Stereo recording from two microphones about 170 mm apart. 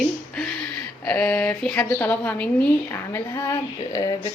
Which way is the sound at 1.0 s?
10° left (ahead or behind).